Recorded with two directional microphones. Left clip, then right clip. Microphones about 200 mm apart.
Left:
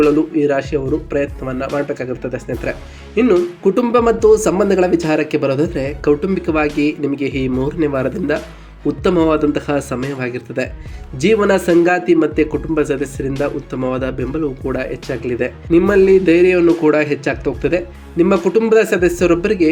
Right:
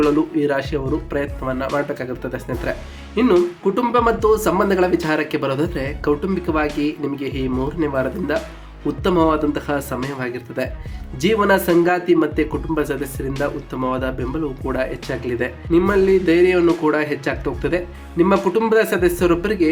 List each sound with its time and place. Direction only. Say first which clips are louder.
0.0 s speech: left 4 dB; centre (ahead or behind)
3.6 s speech: left 3 dB; 15° left (ahead or behind)
15.7 s speech: left 5 dB; 15° left (ahead or behind)